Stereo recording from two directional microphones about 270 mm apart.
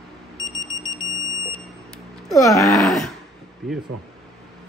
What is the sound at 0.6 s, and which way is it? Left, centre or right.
Smoke detector, centre.